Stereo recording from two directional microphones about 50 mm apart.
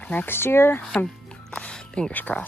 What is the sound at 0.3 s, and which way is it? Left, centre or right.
Speech, left.